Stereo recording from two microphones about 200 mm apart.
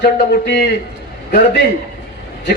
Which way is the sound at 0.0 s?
55° left (ahead or behind).